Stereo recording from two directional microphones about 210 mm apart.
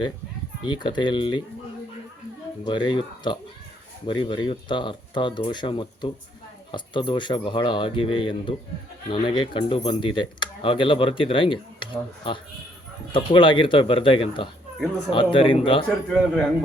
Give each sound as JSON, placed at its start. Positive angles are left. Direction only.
{"t": 0.6, "sound": "speech", "side_deg": 20}
{"t": 2.6, "sound": "speech", "side_deg": 20}
{"t": 16.0, "sound": "a man's voice", "side_deg": 5}